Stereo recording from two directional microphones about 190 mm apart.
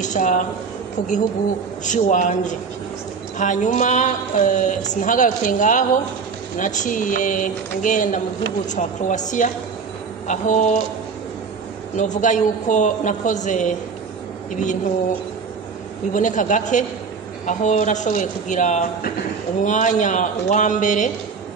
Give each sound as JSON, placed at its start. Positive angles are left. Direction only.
{"t": 0.0, "sound": "a woman's voice", "side_deg": 40}
{"t": 1.9, "sound": "speech", "side_deg": 40}
{"t": 10.2, "sound": "speech", "side_deg": 40}
{"t": 12.0, "sound": "speech", "side_deg": 40}
{"t": 16.1, "sound": "speech", "side_deg": 40}